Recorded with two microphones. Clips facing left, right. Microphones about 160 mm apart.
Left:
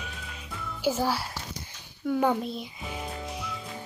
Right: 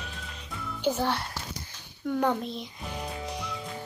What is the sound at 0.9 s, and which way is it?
A child's voice, 5° left (ahead or behind).